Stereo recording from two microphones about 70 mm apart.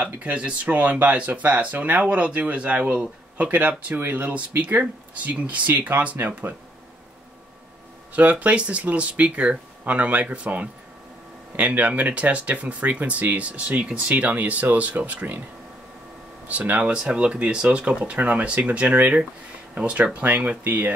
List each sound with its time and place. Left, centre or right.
0.0 s speech: centre
8.1 s speech: right
16.4 s speech: right